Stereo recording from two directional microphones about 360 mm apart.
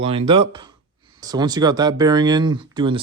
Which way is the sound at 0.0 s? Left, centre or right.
Centre.